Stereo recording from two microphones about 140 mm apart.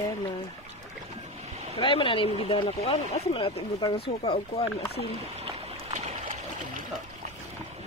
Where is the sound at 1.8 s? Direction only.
40° left (ahead or behind).